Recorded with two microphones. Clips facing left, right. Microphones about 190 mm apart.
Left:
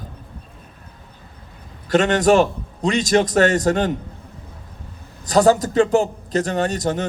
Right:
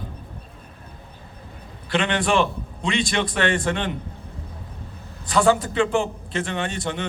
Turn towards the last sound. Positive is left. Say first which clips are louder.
# left 6 dB
turn(degrees=40)  # may be behind; listen again after turning